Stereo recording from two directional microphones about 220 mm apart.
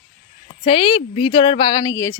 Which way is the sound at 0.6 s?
25° left (ahead or behind).